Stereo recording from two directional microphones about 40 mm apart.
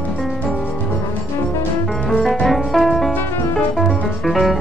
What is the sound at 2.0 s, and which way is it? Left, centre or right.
Music, centre.